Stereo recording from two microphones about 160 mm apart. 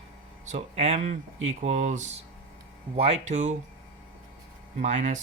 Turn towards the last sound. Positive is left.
turn(degrees=-45)  # may be behind; listen again after turning